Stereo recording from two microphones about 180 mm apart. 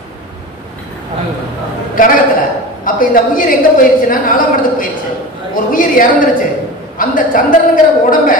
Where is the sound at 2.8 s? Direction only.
50° left (ahead or behind).